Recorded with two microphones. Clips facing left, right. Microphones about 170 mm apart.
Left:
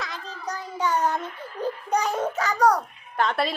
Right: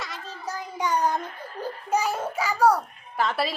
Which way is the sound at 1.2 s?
40° right (ahead or behind).